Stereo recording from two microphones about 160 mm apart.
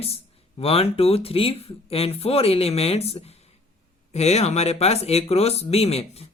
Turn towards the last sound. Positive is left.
turn(degrees=40)  # may be behind; listen again after turning